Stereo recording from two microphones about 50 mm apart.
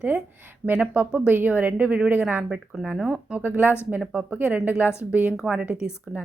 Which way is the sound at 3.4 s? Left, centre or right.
Right.